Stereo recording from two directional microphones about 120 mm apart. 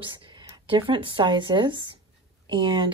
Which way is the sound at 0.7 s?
45° right (ahead or behind).